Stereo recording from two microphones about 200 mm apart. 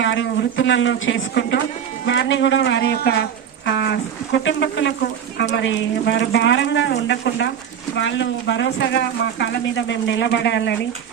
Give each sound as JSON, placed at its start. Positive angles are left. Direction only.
{"t": 0.0, "sound": "speech", "side_deg": 65}